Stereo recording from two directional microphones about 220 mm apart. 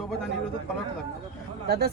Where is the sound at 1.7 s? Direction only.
45° right (ahead or behind).